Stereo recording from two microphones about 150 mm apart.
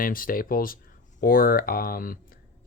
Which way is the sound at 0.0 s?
70° left (ahead or behind).